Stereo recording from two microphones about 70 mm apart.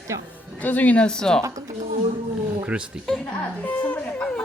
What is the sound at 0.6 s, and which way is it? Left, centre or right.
Speech, left.